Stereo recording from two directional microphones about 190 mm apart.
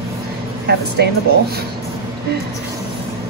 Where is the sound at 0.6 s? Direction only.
60° right (ahead or behind).